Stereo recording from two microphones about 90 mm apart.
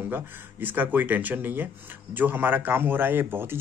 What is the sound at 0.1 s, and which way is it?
Speech, 20° right (ahead or behind).